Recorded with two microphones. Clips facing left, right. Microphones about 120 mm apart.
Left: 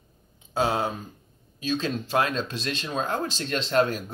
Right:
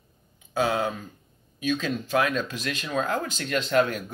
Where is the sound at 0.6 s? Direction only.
30° left (ahead or behind).